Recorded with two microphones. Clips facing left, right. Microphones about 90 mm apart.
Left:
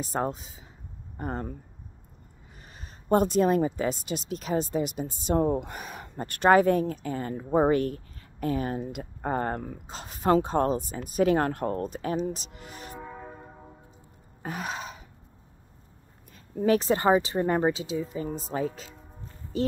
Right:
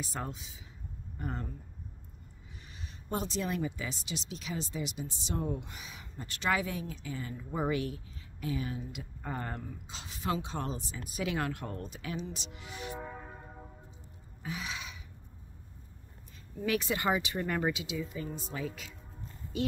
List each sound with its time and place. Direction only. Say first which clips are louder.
0.0 s speech: left 10 dB; 45° left (ahead or behind)
2.7 s speech: left 13 dB; 45° left (ahead or behind)
14.4 s gasp: left 6 dB; 50° left (ahead or behind)
16.6 s speech: left 9 dB; 35° left (ahead or behind)